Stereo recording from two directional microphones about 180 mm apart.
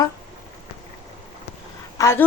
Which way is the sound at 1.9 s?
15° left (ahead or behind).